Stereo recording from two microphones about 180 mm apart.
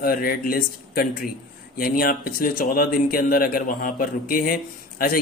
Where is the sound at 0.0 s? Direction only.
55° left (ahead or behind).